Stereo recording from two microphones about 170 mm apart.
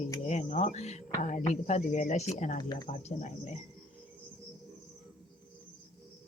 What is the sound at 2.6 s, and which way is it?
Speech, 25° left (ahead or behind).